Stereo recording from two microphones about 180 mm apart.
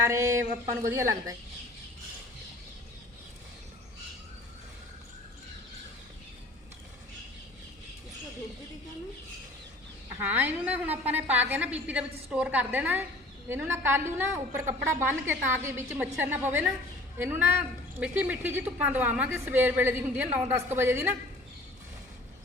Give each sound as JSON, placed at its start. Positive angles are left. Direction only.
{"t": 0.1, "sound": "a woman's voice", "side_deg": -15}
{"t": 10.2, "sound": "a woman's voice", "side_deg": -10}